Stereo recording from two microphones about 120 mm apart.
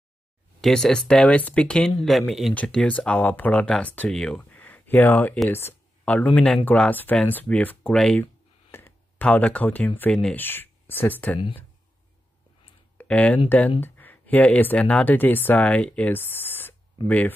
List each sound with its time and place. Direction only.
0.6 s speech: centre (ahead or behind)
12.9 s a sound: 10° left (ahead or behind)
13.7 s speech: 15° left (ahead or behind)